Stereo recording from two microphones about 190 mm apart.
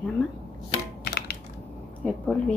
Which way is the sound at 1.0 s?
55° left (ahead or behind).